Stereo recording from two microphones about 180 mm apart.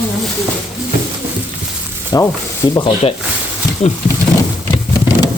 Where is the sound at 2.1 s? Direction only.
20° left (ahead or behind).